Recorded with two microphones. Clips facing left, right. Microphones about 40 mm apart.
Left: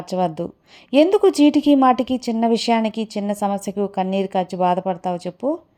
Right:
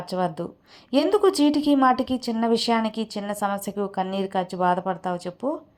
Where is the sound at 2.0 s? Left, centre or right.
Left.